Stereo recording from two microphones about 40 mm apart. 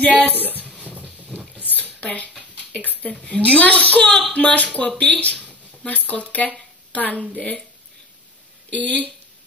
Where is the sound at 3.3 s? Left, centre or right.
Left.